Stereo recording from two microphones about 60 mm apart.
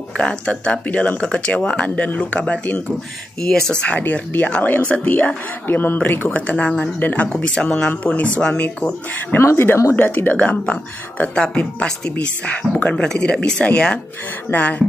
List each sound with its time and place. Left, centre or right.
0.2 s speech: centre
3.3 s speech: centre
4.0 s speech: left
6.4 s speech: centre
7.3 s speech: centre
7.6 s speech: left
9.4 s speech: left
9.9 s speech: left
14.5 s speech: left